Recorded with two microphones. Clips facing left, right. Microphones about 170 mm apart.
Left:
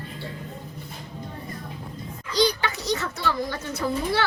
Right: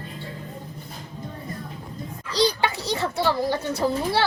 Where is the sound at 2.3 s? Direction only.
30° right (ahead or behind).